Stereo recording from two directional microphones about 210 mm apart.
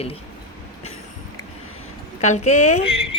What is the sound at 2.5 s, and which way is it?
Speech, 90° left.